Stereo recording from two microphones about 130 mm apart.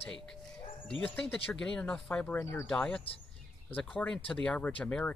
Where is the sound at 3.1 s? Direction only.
45° left (ahead or behind).